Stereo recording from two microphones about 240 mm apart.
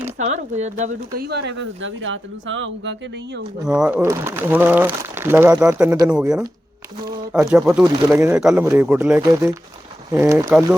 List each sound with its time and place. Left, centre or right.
0.2 s speech: right
1.3 s speech: right
3.7 s speech: centre